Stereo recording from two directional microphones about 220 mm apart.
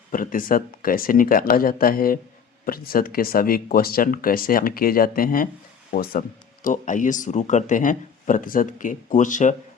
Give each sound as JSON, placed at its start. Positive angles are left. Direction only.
{"t": 0.1, "sound": "speech", "side_deg": 40}